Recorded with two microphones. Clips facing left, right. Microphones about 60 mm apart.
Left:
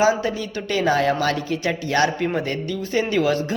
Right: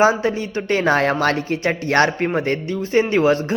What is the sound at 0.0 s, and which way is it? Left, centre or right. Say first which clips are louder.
A man's voice: right 3 dB; right.